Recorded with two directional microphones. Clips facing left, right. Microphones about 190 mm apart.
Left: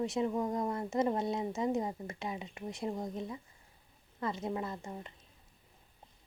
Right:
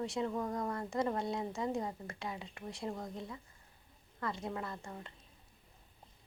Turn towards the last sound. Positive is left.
turn(degrees=20)  # may be behind; listen again after turning